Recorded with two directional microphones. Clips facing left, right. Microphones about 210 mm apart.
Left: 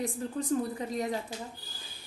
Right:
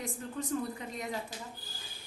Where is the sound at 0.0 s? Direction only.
35° left (ahead or behind).